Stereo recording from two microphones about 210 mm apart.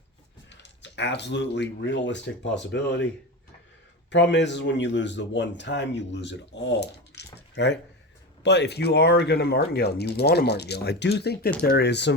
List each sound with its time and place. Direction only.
0.5 s speech: 55° left (ahead or behind)
4.1 s speech: 55° left (ahead or behind)
7.3 s a sound: 55° left (ahead or behind)
8.4 s speech: 55° left (ahead or behind)